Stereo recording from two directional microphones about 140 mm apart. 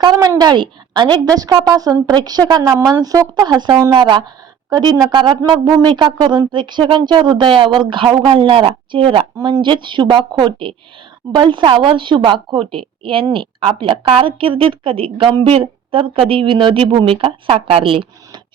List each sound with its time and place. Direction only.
0.0 s a woman's voice: 30° right (ahead or behind)